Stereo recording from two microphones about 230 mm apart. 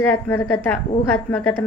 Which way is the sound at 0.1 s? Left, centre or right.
Centre.